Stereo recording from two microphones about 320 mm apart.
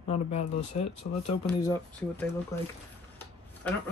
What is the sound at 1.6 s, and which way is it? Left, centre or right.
Speech, centre.